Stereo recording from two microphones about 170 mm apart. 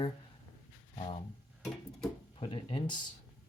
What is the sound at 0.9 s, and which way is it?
Speech, 40° left (ahead or behind).